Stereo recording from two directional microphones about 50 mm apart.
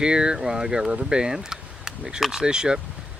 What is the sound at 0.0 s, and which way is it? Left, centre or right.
Speech, centre.